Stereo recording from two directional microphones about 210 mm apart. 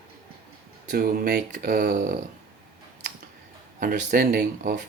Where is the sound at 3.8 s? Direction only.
45° right (ahead or behind).